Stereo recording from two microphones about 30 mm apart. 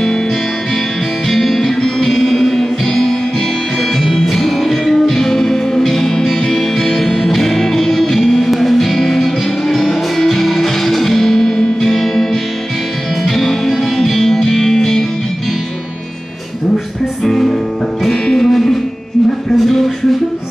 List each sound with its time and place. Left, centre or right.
1.3 s music: centre
1.8 s music: centre
4.0 s music: centre
16.7 s music: centre
18.1 s music: left
18.5 s music: centre